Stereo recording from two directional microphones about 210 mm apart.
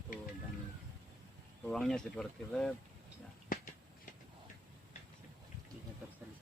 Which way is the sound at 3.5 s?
40° left (ahead or behind).